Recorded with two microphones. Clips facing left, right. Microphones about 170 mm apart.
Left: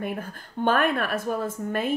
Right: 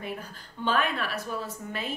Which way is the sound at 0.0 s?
50° left (ahead or behind).